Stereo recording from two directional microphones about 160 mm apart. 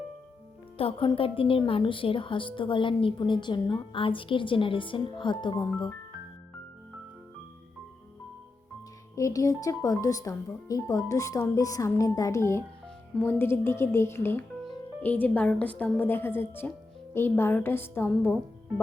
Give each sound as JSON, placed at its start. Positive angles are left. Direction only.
{"t": 0.8, "sound": "a woman's voice", "side_deg": 35}
{"t": 9.1, "sound": "speech", "side_deg": 20}